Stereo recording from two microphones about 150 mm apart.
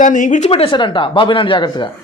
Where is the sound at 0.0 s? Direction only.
60° left (ahead or behind).